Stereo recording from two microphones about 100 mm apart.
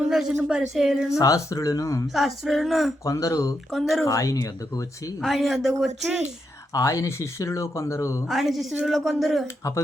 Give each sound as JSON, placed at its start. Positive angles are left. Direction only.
{"t": 0.1, "sound": "speech", "side_deg": -5}
{"t": 1.2, "sound": "speech", "side_deg": 35}
{"t": 2.1, "sound": "speech", "side_deg": 0}
{"t": 3.0, "sound": "speech", "side_deg": 30}
{"t": 3.7, "sound": "speech", "side_deg": 0}
{"t": 4.0, "sound": "speech", "side_deg": 35}
{"t": 5.2, "sound": "speech", "side_deg": 0}
{"t": 6.7, "sound": "speech", "side_deg": 35}
{"t": 8.3, "sound": "speech", "side_deg": 0}